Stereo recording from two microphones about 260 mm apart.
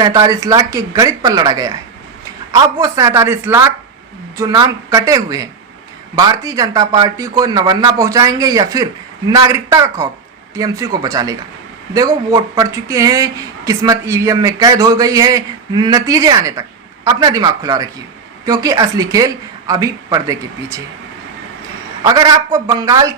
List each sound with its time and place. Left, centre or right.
0.0 s speech: centre
22.0 s speech: centre